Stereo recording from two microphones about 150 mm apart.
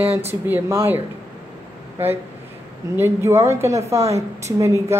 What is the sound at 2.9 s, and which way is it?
A woman's voice, 15° right (ahead or behind).